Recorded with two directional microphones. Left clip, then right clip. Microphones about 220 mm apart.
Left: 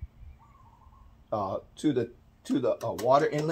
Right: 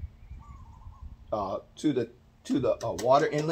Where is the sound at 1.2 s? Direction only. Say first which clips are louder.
Even; 15° left (ahead or behind).